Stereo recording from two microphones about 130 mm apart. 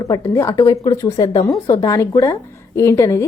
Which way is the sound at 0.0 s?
25° left (ahead or behind).